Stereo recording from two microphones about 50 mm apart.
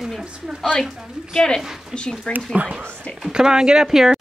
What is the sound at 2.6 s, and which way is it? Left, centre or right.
Speech, right.